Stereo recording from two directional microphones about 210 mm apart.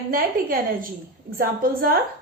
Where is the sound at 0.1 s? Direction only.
40° right (ahead or behind).